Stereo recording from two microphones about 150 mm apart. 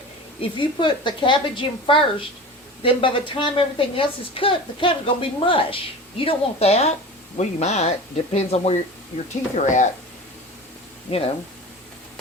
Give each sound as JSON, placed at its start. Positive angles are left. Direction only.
{"t": 0.5, "sound": "a woman's voice", "side_deg": 35}
{"t": 11.1, "sound": "speech", "side_deg": 45}